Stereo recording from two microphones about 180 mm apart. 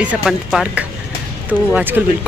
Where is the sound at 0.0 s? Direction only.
5° right (ahead or behind).